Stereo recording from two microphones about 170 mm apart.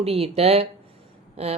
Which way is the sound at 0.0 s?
35° right (ahead or behind).